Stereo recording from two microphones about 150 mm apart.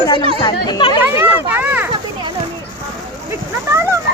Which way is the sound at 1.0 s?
15° right (ahead or behind).